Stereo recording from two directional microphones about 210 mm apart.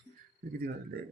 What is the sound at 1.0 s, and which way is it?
Speech, 45° right (ahead or behind).